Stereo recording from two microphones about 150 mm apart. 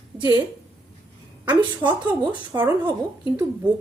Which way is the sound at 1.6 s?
25° right (ahead or behind).